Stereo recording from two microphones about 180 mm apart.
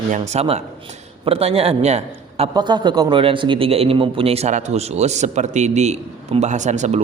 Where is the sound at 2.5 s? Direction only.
25° right (ahead or behind).